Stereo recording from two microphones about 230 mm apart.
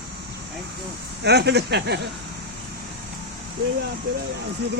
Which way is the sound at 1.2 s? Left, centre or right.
Right.